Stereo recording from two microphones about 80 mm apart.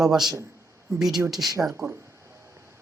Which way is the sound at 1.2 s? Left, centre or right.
Centre.